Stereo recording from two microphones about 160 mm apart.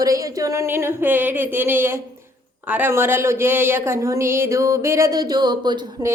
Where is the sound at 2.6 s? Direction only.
10° right (ahead or behind); by 6.1 s 25° right (ahead or behind).